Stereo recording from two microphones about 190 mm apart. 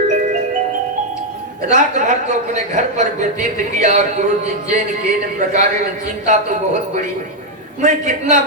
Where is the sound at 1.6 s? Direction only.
40° right (ahead or behind).